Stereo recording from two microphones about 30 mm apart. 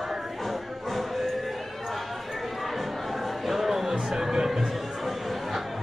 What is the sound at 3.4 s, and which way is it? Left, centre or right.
Music, centre.